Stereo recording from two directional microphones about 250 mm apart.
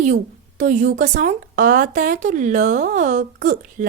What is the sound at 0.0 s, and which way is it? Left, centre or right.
A woman's voice, right.